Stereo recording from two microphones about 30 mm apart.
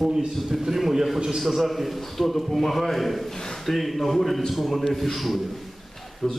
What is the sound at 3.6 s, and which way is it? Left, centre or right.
A man's voice, centre.